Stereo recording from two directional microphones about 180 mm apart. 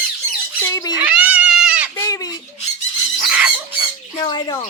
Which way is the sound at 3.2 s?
5° right (ahead or behind).